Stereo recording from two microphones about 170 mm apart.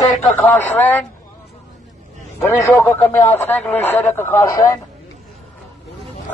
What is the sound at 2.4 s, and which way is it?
Speech, 15° left (ahead or behind).